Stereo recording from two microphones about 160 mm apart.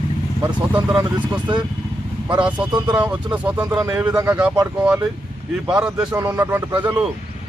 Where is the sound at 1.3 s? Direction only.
30° right (ahead or behind).